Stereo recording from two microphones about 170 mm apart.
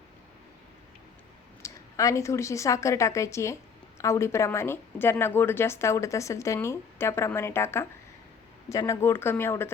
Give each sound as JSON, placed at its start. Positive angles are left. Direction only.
{"t": 1.6, "sound": "a woman's voice", "side_deg": 20}